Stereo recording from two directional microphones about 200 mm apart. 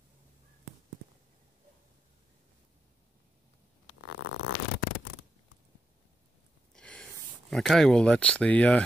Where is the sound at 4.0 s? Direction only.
85° left.